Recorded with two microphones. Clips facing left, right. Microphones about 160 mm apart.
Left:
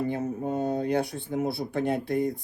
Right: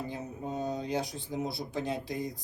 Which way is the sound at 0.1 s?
60° left (ahead or behind).